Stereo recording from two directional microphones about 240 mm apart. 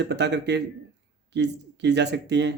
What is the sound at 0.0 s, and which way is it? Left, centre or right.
Speech, right.